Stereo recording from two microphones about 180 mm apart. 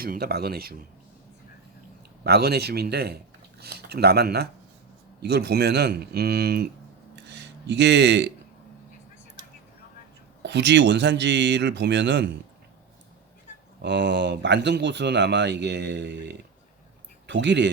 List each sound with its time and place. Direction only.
0.0 s speech: 55° right (ahead or behind)
2.2 s speech: 60° right (ahead or behind)
7.3 s speech: 70° right (ahead or behind)
10.4 s speech: 75° right (ahead or behind)
13.8 s speech: 75° right (ahead or behind)